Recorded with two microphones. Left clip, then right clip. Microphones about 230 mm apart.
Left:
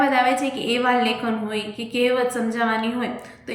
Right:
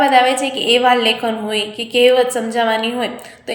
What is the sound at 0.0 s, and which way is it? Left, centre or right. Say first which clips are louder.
A woman's voice: right 6 dB; centre.